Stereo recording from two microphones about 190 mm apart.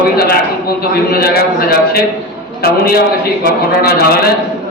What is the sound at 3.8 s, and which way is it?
Speech, 55° left (ahead or behind).